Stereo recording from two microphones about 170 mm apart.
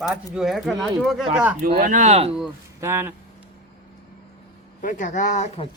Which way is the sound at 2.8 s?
15° right (ahead or behind).